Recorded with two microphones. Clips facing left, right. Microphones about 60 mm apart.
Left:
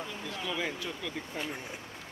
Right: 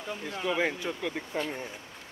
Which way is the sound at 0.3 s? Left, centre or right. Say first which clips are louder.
Right 7 dB; right.